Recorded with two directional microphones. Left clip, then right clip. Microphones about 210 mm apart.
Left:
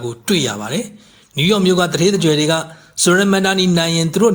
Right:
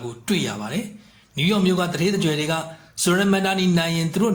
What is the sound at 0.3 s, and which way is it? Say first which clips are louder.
A man's voice: left 7 dB; 35° left (ahead or behind).